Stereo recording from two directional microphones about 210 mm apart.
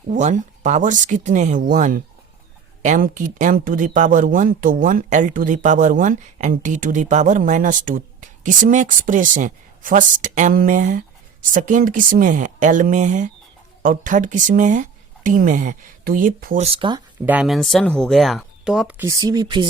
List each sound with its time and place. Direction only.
0.1 s speech: 35° right (ahead or behind)
16.6 s speech: 25° right (ahead or behind)
17.2 s speech: 5° right (ahead or behind)